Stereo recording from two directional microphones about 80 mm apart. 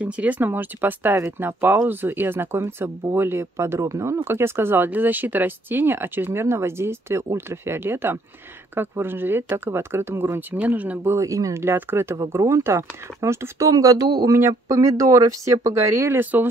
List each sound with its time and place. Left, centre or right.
0.0 s speech: centre
11.1 s speech: right
13.7 s speech: right
14.0 s speech: right
14.5 s speech: right